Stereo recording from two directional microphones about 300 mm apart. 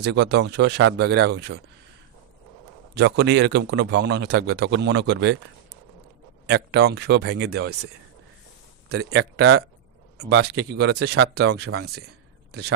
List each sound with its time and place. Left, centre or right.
0.0 s speech: right
2.9 s speech: right
6.5 s speech: right
8.9 s speech: right